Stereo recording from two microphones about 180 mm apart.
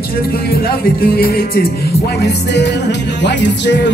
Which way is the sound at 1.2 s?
55° left (ahead or behind).